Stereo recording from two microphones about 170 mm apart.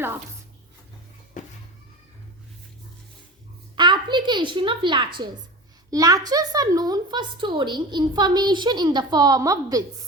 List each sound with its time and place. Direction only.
1.4 s music: 45° left (ahead or behind)
3.8 s a woman's voice: 25° right (ahead or behind)